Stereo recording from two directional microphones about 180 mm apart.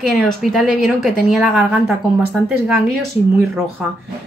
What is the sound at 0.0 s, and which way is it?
A woman's voice, centre (ahead or behind).